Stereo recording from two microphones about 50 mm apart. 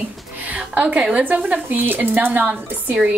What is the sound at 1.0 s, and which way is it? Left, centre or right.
Speech, centre.